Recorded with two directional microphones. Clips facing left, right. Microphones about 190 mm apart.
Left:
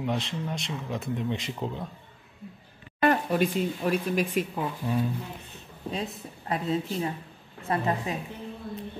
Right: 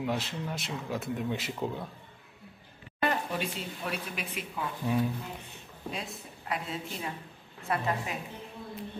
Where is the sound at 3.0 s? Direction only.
50° left (ahead or behind).